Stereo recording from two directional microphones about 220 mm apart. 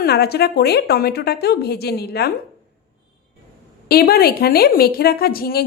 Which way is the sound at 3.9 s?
45° left (ahead or behind).